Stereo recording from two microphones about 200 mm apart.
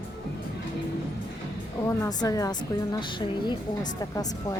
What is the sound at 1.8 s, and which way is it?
A woman's voice, 15° left (ahead or behind).